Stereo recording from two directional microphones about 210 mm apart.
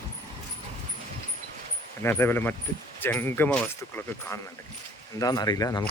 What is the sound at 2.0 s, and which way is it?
A man's voice, 10° left (ahead or behind).